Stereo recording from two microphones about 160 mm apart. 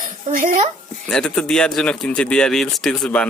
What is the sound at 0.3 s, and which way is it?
Speech, 55° right (ahead or behind).